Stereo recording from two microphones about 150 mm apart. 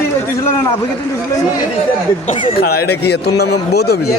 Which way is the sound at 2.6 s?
90° left.